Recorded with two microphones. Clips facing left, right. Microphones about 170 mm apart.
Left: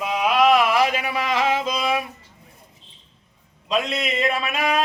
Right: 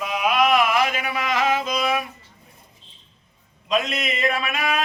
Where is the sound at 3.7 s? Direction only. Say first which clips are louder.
Even; 30° left (ahead or behind).